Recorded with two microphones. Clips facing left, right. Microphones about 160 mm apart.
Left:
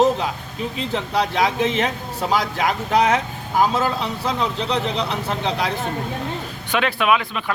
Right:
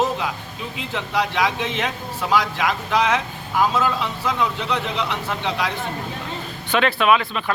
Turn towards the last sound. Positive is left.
turn(degrees=10)  # may be behind; listen again after turning